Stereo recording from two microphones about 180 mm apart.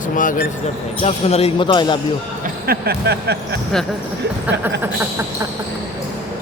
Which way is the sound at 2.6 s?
60° right (ahead or behind).